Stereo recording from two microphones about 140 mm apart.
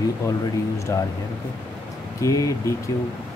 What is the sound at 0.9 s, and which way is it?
Speech, 25° left (ahead or behind).